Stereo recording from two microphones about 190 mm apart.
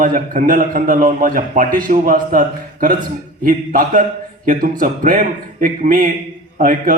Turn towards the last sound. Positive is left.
turn(degrees=-45)  # may be behind; listen again after turning